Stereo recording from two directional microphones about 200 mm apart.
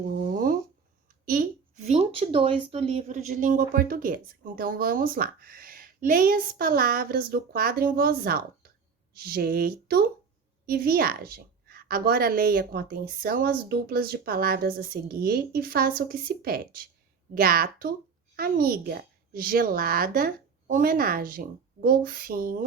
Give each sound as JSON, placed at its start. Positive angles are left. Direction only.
{"t": 1.2, "sound": "a woman's voice", "side_deg": -45}